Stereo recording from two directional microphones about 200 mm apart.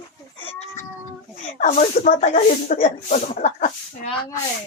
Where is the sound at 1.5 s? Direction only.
40° left (ahead or behind).